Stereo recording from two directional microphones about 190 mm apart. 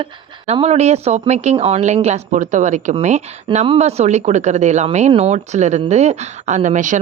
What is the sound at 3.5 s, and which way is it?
A woman's voice, 30° right (ahead or behind).